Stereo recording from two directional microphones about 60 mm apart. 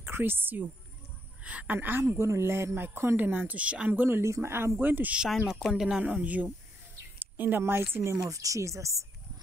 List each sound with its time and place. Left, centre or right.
0.0 s a woman's voice: right
1.4 s speech: right
2.0 s speech: right; by 3.9 s centre
3.9 s speech: right
4.2 s speech: right
4.7 s speech: right
5.5 s speech: centre
6.0 s speech: right
7.3 s speech: right
8.2 s speech: right